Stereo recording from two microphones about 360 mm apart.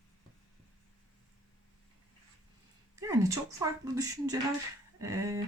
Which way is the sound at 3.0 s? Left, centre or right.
Centre.